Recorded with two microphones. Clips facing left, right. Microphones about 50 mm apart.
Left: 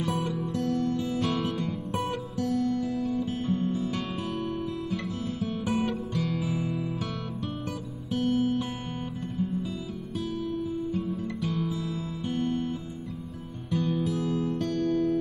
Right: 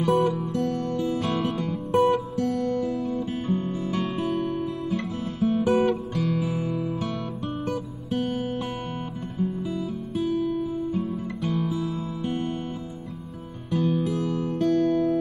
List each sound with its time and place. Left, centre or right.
0.0 s music: centre
9.4 s music: centre
13.7 s music: centre
14.7 s music: right